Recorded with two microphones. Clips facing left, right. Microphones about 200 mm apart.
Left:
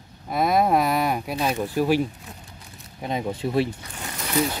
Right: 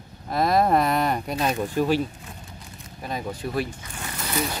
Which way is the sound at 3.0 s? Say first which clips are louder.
Left 4 dB; 20° left (ahead or behind).